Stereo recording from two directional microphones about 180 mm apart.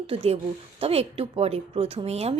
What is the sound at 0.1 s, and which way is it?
A woman's voice, 30° right (ahead or behind).